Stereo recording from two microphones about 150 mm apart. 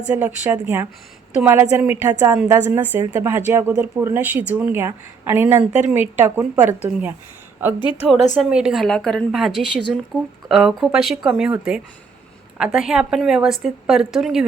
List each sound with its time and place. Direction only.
0.1 s a woman's voice: 10° right (ahead or behind)
7.8 s a woman's voice: 35° left (ahead or behind)
8.4 s a woman's voice: 5° right (ahead or behind)